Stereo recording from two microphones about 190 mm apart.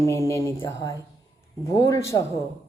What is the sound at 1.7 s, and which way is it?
Speech, 20° left (ahead or behind).